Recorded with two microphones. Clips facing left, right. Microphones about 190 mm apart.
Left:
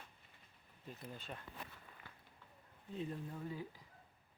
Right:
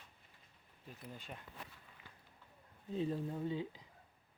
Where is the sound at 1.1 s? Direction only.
15° right (ahead or behind).